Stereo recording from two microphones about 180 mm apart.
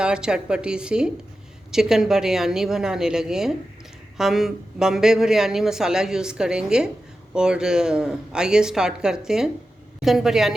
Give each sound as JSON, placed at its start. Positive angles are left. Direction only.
{"t": 0.0, "sound": "speech", "side_deg": -5}